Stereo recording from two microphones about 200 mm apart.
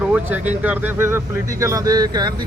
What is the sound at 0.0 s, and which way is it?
Speech, 10° right (ahead or behind).